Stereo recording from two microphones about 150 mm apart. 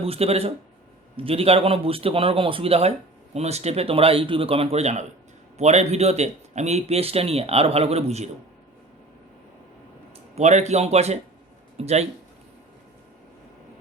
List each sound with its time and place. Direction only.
0.0 s a man's voice: 40° right (ahead or behind)
10.3 s speech: 50° right (ahead or behind)